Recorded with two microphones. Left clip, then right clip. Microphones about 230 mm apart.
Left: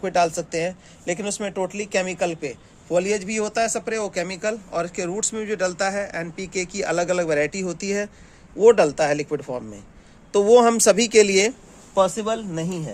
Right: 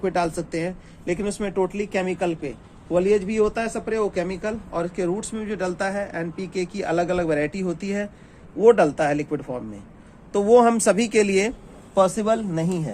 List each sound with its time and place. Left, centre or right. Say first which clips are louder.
0.0 s speech: left 3 dB; left
11.9 s speech: right 1 dB; centre